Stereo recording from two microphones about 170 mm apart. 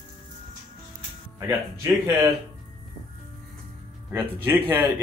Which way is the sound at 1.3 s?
20° right (ahead or behind).